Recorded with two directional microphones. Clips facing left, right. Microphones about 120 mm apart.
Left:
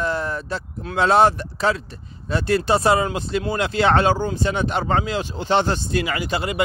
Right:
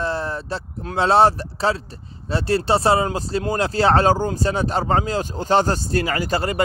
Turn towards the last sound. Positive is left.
turn(degrees=-40)  # may be behind; listen again after turning